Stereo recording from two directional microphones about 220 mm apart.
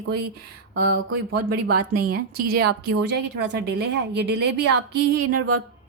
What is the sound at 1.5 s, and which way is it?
A woman's voice, 45° right (ahead or behind).